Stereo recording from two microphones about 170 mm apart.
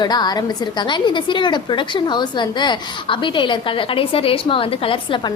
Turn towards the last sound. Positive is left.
turn(degrees=30)  # may be behind; listen again after turning